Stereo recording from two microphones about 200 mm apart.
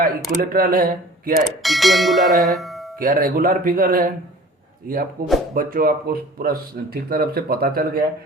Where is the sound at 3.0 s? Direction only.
45° right (ahead or behind).